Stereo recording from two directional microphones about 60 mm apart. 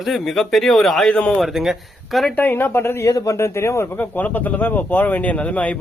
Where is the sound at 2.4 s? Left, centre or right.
Left.